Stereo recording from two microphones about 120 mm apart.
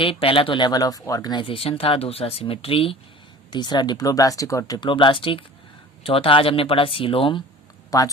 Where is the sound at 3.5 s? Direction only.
40° left (ahead or behind).